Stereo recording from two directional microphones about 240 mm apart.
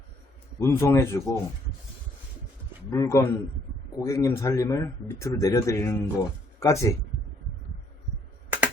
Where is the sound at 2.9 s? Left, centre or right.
Centre.